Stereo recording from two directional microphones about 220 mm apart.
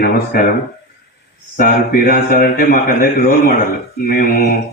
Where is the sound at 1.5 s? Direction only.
40° left (ahead or behind).